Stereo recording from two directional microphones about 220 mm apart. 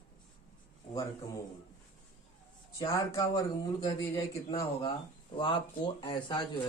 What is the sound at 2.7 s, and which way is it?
A man's voice, 25° left (ahead or behind).